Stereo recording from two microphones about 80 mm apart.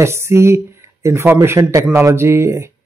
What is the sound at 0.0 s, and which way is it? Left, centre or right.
Speech, right.